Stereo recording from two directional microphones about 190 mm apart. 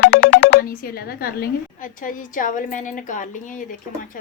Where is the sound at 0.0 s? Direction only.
70° left (ahead or behind).